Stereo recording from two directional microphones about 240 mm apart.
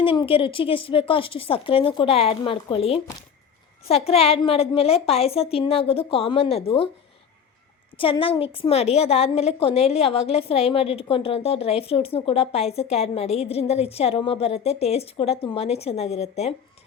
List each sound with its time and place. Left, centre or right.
0.0 s a woman's voice: left
7.9 s a woman's voice: left